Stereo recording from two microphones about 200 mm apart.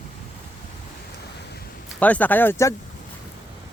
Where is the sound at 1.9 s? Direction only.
5° left (ahead or behind).